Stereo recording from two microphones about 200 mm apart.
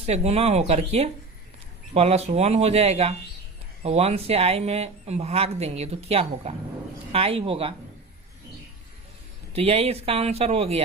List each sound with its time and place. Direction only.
0.0 s speech: 30° right (ahead or behind)
9.5 s speech: 30° right (ahead or behind)